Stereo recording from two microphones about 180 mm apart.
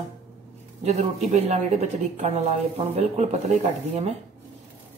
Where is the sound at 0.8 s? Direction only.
40° right (ahead or behind).